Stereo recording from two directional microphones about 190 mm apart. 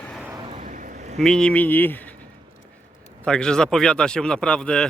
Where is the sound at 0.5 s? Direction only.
40° right (ahead or behind).